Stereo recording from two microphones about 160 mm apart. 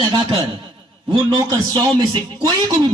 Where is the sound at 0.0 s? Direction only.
35° right (ahead or behind).